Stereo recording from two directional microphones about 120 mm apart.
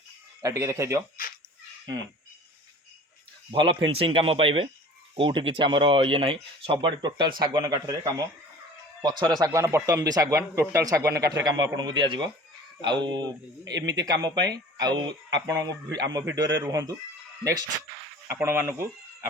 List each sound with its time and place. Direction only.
0.4 s speech: 25° right (ahead or behind)
3.5 s speech: 40° right (ahead or behind)
9.4 s speech: 25° right (ahead or behind)
18.3 s speech: 15° right (ahead or behind)